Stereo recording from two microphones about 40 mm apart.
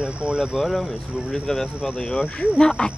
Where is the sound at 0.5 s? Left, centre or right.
Centre.